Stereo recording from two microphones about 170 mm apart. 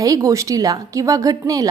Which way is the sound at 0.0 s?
20° right (ahead or behind).